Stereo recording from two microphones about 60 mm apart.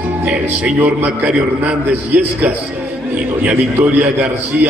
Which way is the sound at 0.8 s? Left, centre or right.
Right.